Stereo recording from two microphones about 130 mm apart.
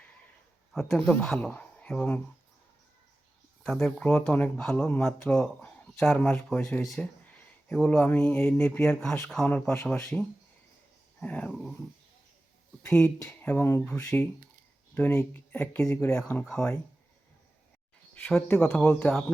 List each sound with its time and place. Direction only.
0.7 s speech: 5° left (ahead or behind)
3.6 s speech: centre (ahead or behind)
12.8 s speech: 20° left (ahead or behind)
15.8 s speech: 25° left (ahead or behind)
16.1 s speech: 5° left (ahead or behind)
18.1 s speech: 5° left (ahead or behind)